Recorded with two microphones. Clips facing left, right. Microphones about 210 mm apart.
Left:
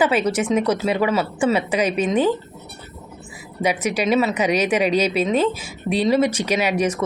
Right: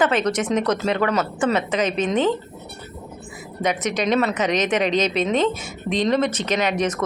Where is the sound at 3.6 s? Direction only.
10° left (ahead or behind).